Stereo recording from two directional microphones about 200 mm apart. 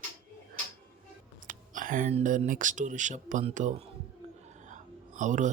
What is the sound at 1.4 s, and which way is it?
Speech, 40° right (ahead or behind).